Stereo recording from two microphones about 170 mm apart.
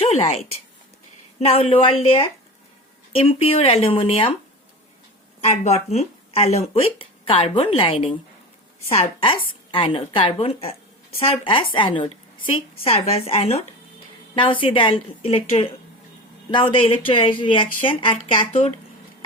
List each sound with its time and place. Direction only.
0.0 s speech: 35° left (ahead or behind)
5.4 s speech: 40° left (ahead or behind)